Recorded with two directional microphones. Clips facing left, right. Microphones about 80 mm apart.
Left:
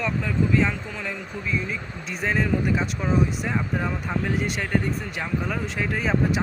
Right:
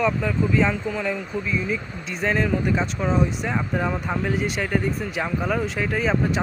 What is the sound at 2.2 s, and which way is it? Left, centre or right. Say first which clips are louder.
Speech: right 2 dB; centre.